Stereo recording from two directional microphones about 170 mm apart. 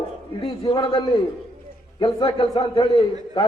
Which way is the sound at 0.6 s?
30° left (ahead or behind).